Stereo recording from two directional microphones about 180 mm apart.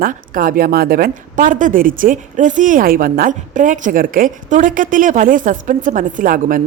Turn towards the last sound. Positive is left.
turn(degrees=-50)  # may be behind; listen again after turning